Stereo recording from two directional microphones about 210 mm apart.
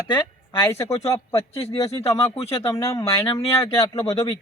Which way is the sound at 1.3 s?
30° left (ahead or behind).